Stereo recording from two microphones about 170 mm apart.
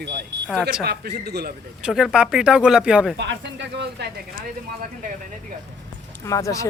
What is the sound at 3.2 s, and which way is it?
Speech, 90° right.